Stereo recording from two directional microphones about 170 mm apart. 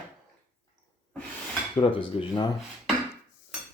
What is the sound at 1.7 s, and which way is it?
Speech, 30° left (ahead or behind).